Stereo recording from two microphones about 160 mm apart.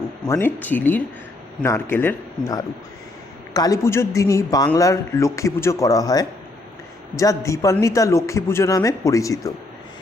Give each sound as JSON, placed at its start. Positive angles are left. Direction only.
{"t": 0.3, "sound": "a man's voice", "side_deg": 15}